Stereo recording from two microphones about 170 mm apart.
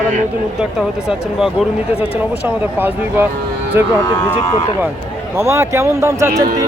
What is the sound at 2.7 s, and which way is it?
Speech, 10° right (ahead or behind).